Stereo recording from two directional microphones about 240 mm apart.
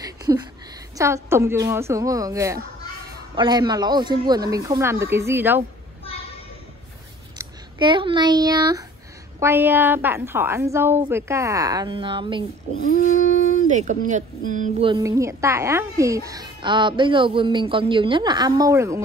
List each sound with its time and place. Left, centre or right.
0.2 s a sound: centre
0.9 s a woman's voice: centre
7.3 s a woman's voice: centre
13.7 s speech: right
14.9 s a woman's voice: centre